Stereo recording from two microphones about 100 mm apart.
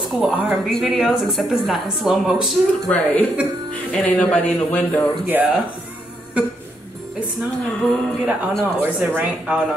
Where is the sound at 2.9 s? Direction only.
15° left (ahead or behind).